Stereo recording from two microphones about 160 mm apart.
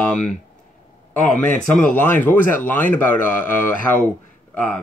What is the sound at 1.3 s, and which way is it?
Speech, 10° left (ahead or behind).